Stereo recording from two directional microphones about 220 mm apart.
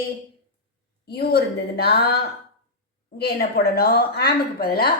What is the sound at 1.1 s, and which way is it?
Speech, 45° left (ahead or behind).